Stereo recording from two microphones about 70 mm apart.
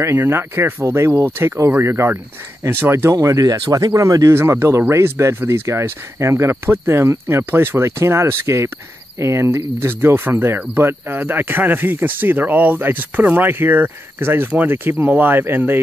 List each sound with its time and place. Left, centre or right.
0.0 s speech: right
3.2 s speech: right
3.9 s speech: right
4.3 s speech: right